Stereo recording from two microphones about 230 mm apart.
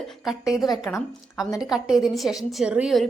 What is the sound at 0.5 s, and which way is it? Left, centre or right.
Speech, centre.